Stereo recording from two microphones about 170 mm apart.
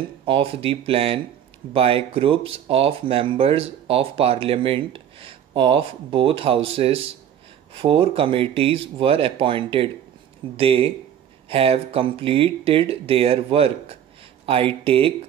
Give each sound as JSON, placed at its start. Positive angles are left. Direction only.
{"t": 0.2, "sound": "speech", "side_deg": -30}